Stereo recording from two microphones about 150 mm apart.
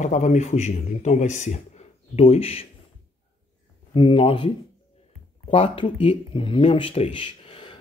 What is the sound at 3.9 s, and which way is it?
Speech, 35° left (ahead or behind).